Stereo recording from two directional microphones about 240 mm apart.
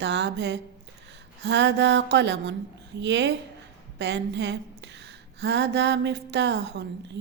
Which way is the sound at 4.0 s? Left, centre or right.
Right.